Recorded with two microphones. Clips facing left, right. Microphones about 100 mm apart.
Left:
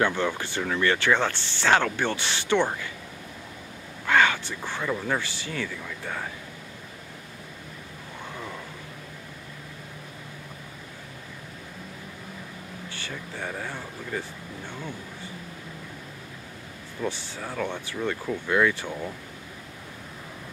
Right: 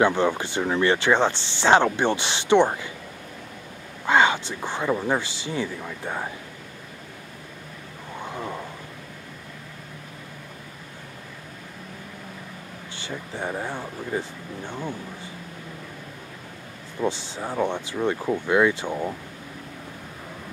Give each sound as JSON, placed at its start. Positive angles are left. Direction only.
{"t": 0.0, "sound": "speech", "side_deg": -20}
{"t": 4.0, "sound": "speech", "side_deg": -20}
{"t": 8.3, "sound": "vehicle", "side_deg": -25}
{"t": 12.9, "sound": "speech", "side_deg": -20}
{"t": 17.0, "sound": "speech", "side_deg": -25}